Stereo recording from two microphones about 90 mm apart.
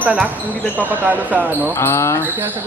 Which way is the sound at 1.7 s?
30° left (ahead or behind).